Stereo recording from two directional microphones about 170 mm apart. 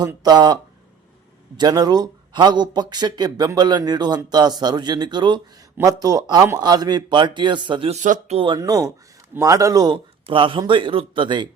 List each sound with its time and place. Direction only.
0.0 s speech: 25° right (ahead or behind)
8.0 s speech: 50° right (ahead or behind)
8.4 s speech: 25° right (ahead or behind)